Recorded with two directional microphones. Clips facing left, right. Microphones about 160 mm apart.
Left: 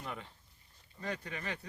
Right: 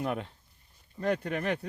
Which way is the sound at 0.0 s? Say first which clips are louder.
Right 11 dB; 65° right (ahead or behind).